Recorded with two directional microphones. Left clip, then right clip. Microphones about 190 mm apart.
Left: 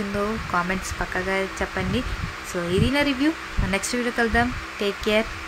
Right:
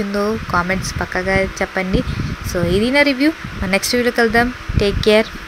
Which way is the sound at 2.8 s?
25° right (ahead or behind).